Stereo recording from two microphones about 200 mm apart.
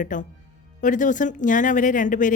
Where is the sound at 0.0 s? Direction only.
40° left (ahead or behind).